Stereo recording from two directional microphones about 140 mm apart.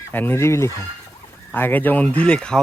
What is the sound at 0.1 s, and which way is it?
Speech, 15° left (ahead or behind).